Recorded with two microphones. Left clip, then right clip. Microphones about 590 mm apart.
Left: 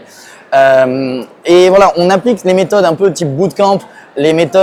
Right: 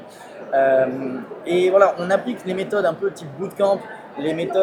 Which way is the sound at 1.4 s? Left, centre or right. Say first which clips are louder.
Left 9 dB; left.